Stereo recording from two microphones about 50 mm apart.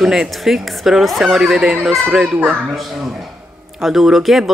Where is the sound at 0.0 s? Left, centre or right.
Centre.